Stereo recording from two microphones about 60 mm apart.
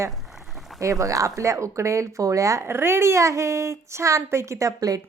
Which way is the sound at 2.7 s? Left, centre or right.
Right.